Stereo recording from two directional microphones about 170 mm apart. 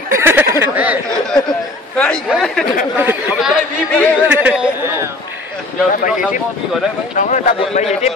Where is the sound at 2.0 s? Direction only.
5° left (ahead or behind).